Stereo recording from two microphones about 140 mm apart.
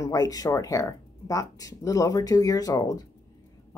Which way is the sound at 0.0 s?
25° left (ahead or behind).